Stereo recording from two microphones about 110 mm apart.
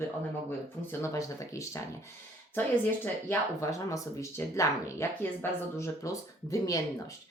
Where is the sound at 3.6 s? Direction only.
30° left (ahead or behind).